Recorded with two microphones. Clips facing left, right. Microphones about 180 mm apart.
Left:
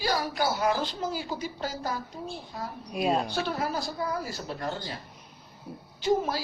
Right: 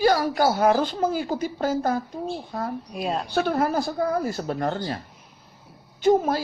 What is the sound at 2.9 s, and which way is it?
Speech, centre (ahead or behind).